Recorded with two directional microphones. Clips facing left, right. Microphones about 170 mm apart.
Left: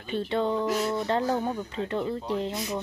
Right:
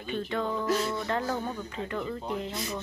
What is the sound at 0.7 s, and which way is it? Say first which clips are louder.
Speech: left 2 dB; 15° left (ahead or behind).